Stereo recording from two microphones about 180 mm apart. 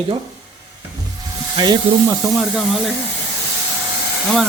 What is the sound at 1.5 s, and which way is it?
Speech, 25° right (ahead or behind).